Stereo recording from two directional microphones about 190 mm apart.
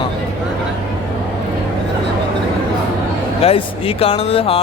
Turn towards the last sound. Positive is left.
turn(degrees=30)  # may be behind; listen again after turning